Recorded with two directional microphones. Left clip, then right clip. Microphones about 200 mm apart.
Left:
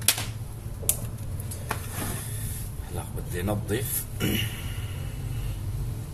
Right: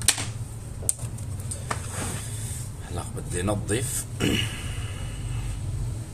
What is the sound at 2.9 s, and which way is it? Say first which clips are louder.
A man's voice: right 2 dB; 25° right (ahead or behind).